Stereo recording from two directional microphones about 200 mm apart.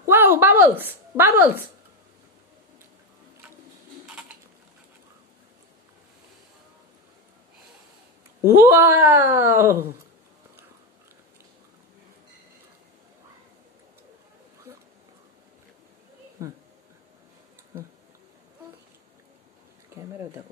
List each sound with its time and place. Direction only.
0.0 s a woman's voice: 10° right (ahead or behind)
8.5 s speech: 15° right (ahead or behind)
16.4 s speech: 15° right (ahead or behind)
19.9 s a sound: 15° right (ahead or behind)